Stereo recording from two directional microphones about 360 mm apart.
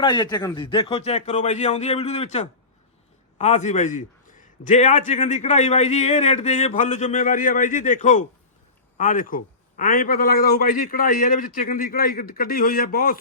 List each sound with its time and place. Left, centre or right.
0.0 s a man's voice: centre